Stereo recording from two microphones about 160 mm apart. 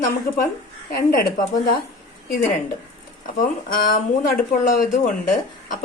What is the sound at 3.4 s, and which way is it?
A woman's voice, 60° left (ahead or behind).